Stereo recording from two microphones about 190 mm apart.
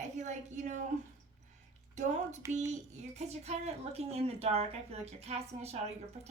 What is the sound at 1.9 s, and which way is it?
A woman's voice, 35° right (ahead or behind).